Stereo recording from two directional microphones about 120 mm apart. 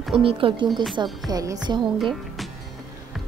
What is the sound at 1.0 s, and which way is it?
Music, 35° right (ahead or behind).